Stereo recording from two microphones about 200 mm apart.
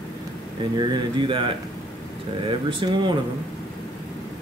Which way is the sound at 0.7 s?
20° right (ahead or behind).